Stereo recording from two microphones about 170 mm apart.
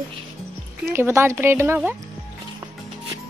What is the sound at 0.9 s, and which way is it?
Speech, 15° right (ahead or behind).